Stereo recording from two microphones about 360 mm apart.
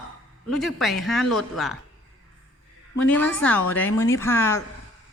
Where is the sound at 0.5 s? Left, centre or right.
Centre.